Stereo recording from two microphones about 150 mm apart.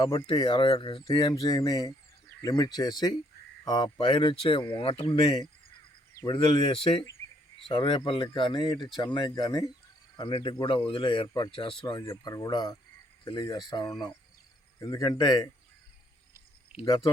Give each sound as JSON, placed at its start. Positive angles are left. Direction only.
{"t": 0.0, "sound": "speech", "side_deg": 30}
{"t": 16.8, "sound": "speech", "side_deg": 25}